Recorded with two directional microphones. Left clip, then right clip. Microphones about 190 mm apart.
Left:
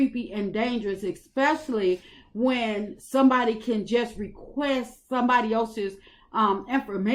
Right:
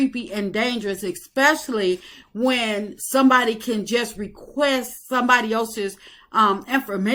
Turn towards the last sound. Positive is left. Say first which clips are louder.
# right 5 dB
turn(degrees=-15)  # may be behind; listen again after turning